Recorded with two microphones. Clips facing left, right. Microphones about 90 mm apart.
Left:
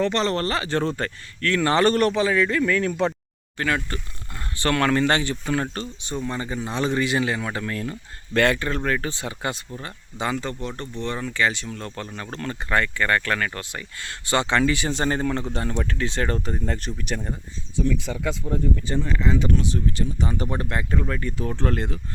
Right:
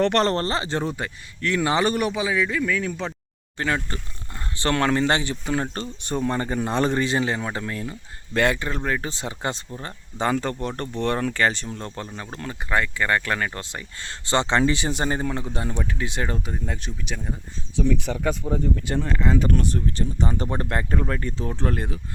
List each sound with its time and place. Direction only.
0.0 s speech: 55° right (ahead or behind)
0.3 s speech: 30° right (ahead or behind)
0.8 s a man's voice: 10° right (ahead or behind)
3.9 s speech: 25° right (ahead or behind)
6.0 s speech: 50° right (ahead or behind); by 9.6 s 25° right (ahead or behind)
9.8 s speech: 40° right (ahead or behind)
11.9 s a man's voice: 15° right (ahead or behind); by 17.2 s centre (ahead or behind)
17.7 s speech: 65° right (ahead or behind); by 21.9 s 15° right (ahead or behind)